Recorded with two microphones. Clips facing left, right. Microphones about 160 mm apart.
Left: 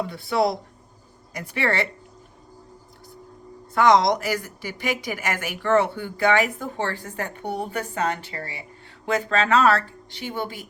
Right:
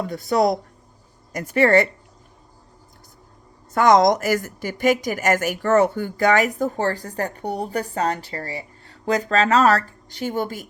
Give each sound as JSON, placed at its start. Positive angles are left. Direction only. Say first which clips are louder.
{"t": 0.0, "sound": "speech", "louder": "right 3 dB", "side_deg": -45}
{"t": 3.8, "sound": "a woman's voice", "louder": "right 3 dB", "side_deg": -45}